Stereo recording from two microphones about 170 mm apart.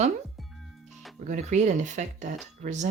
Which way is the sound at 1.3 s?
45° right (ahead or behind).